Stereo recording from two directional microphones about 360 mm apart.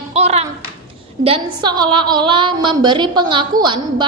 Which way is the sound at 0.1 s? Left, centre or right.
Centre.